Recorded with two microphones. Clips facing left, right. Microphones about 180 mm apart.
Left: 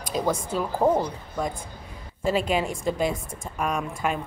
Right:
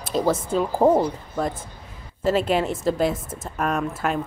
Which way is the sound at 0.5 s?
25° right (ahead or behind).